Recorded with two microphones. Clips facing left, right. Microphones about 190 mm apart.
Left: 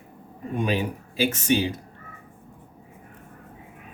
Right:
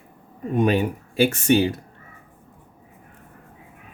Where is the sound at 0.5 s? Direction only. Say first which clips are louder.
Right 6 dB; 50° right (ahead or behind).